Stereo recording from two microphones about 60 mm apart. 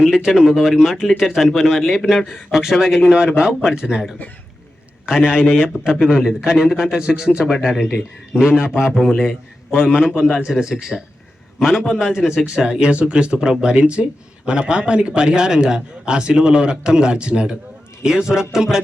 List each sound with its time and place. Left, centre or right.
0.1 s speech: centre
7.4 s speech: centre
9.0 s a man's voice: centre
10.2 s speech: centre